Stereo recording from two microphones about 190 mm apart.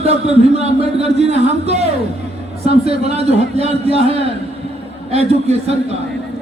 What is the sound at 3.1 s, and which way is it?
Speech, 35° right (ahead or behind).